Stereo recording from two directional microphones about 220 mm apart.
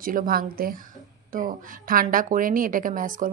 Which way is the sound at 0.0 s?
40° right (ahead or behind).